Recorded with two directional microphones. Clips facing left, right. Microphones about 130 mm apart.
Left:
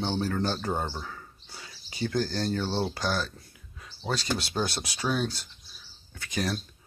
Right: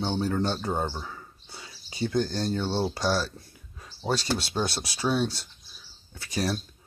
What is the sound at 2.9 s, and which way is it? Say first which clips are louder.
Speech: right 3 dB; 30° right (ahead or behind).